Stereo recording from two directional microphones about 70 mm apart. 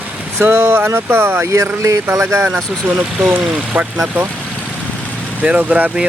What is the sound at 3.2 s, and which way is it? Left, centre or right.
Speech, centre.